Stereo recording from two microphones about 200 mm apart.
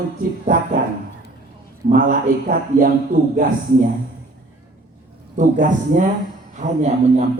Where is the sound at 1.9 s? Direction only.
45° right (ahead or behind).